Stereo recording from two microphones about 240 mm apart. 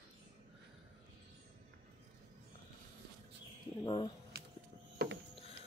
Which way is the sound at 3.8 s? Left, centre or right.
Centre.